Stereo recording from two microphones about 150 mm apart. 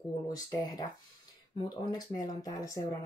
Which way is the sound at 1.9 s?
25° left (ahead or behind).